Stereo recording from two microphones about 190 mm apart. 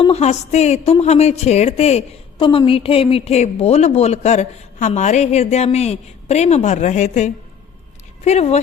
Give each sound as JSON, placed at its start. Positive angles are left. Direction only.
{"t": 0.0, "sound": "a woman's voice", "side_deg": 35}